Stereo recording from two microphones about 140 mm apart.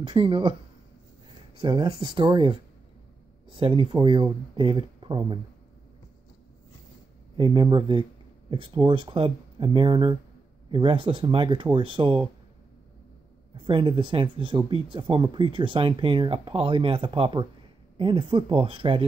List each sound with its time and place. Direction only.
0.0 s speech: 35° right (ahead or behind)
1.6 s speech: 30° right (ahead or behind)
3.5 s speech: 35° right (ahead or behind)
7.3 s speech: 35° right (ahead or behind)
13.7 s speech: 35° right (ahead or behind)